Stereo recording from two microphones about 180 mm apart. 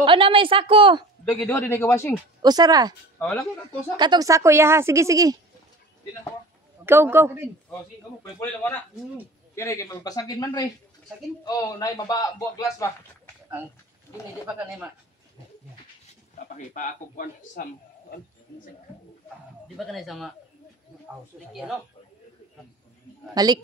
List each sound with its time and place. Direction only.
0.0 s a woman's voice: 30° right (ahead or behind)
1.2 s a man's voice: 10° left (ahead or behind)
2.4 s a woman's voice: 20° right (ahead or behind)
3.2 s speech: 5° left (ahead or behind)
3.9 s a woman's voice: 25° right (ahead or behind)
6.9 s a woman's voice: 15° right (ahead or behind)
9.6 s speech: 15° left (ahead or behind)
16.5 s speech: 45° left (ahead or behind)
19.8 s a man's voice: centre (ahead or behind)
21.5 s a man's voice: centre (ahead or behind)
23.3 s a woman's voice: 20° right (ahead or behind)